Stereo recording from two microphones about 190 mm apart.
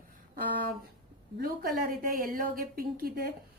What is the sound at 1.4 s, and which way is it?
A woman's voice, 50° right (ahead or behind).